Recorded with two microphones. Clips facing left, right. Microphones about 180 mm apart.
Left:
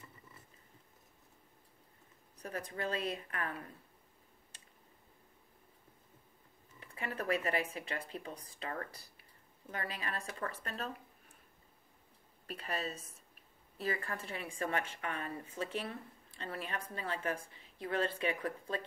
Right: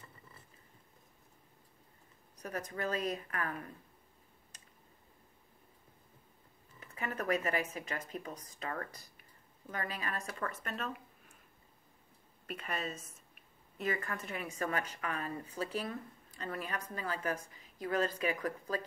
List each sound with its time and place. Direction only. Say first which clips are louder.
2.6 s a woman's voice: right 2 dB; 30° left (ahead or behind)
6.8 s a sound: right 1 dB; 30° left (ahead or behind)
7.4 s a woman's voice: even; 35° left (ahead or behind)
9.7 s speech: right 2 dB; 40° right (ahead or behind)
10.4 s a woman's voice: right 1 dB; 35° left (ahead or behind)
12.4 s a woman's voice: even; 35° left (ahead or behind)
15.4 s speech: right 1 dB; 35° right (ahead or behind)
15.8 s a woman's voice: right 3 dB; 30° left (ahead or behind)